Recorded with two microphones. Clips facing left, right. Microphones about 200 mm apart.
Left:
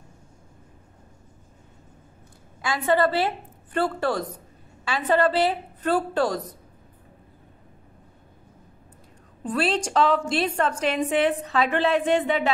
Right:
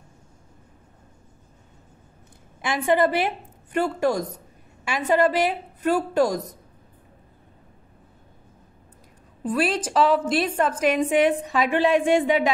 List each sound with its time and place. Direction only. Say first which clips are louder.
2.6 s a woman's voice: right 1 dB; 20° right (ahead or behind)
9.4 s a woman's voice: right 1 dB; 10° right (ahead or behind)